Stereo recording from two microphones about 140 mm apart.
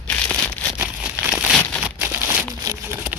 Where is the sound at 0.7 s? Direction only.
10° right (ahead or behind).